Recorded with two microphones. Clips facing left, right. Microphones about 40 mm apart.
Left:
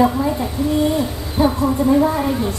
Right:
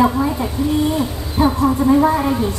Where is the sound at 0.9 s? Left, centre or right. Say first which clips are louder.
Even; right.